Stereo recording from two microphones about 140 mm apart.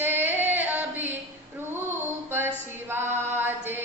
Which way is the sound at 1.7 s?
15° right (ahead or behind).